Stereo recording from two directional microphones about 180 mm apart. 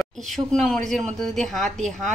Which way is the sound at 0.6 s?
Centre (ahead or behind).